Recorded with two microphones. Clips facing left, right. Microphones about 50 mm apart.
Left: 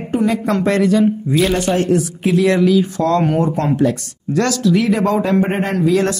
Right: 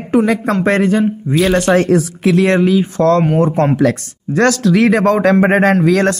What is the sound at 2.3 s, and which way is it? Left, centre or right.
Speech, right.